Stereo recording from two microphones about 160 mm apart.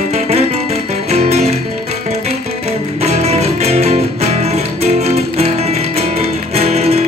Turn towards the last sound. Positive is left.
turn(degrees=-40)  # may be behind; listen again after turning